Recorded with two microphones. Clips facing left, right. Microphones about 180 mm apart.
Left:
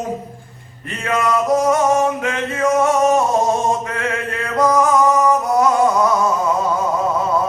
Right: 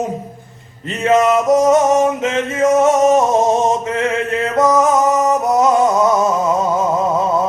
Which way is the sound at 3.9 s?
20° right (ahead or behind).